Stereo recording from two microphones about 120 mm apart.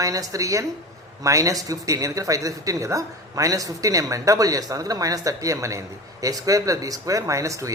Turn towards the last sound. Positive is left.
turn(degrees=-25)  # may be behind; listen again after turning